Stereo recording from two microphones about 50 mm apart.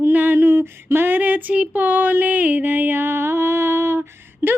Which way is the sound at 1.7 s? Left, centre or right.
Right.